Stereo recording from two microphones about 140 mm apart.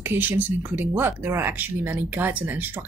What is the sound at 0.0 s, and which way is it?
Speech, 15° right (ahead or behind).